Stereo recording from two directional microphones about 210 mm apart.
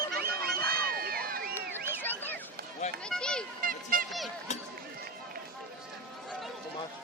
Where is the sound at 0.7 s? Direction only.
45° right (ahead or behind).